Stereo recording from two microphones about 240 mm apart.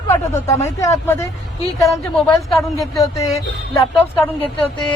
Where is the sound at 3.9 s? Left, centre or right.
Centre.